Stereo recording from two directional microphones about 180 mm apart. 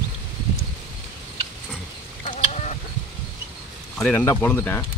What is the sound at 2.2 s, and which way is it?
Chicken, 40° left (ahead or behind).